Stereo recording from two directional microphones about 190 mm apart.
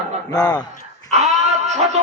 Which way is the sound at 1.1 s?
35° right (ahead or behind).